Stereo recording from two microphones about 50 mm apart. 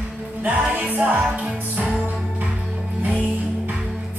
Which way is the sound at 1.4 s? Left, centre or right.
Centre.